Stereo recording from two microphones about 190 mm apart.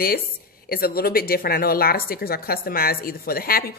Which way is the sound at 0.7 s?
55° left (ahead or behind).